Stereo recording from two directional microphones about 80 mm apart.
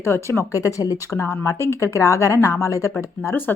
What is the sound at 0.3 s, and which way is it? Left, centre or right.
Speech, left.